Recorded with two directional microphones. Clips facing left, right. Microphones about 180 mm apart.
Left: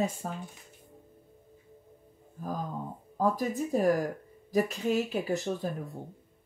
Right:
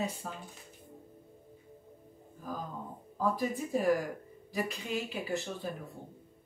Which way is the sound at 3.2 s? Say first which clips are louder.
Left 3 dB; 40° left (ahead or behind).